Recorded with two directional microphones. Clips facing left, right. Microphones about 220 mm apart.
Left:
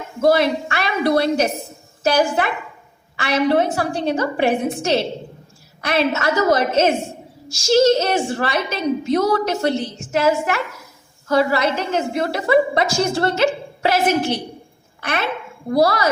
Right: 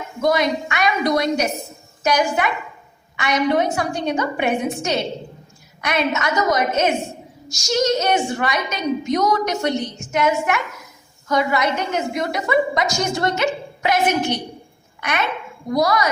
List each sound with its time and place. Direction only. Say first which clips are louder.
0.2 s a woman's voice: left 3 dB; 30° left (ahead or behind)